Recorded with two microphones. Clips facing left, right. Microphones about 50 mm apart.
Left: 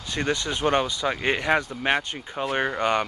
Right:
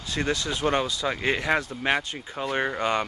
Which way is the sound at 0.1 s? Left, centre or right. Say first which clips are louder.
Left 1 dB; left.